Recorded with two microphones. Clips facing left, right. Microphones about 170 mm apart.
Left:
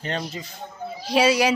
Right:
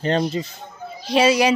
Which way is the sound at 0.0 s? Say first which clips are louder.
Right 9 dB; 30° right (ahead or behind).